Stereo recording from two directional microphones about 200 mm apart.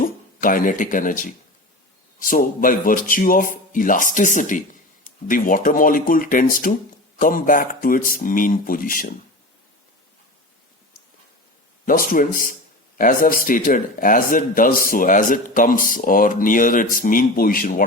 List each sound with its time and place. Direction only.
0.0 s a man's voice: 45° left (ahead or behind)
11.9 s a man's voice: 45° left (ahead or behind)